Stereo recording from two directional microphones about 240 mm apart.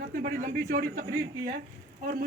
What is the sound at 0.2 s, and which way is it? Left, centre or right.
Speech, right.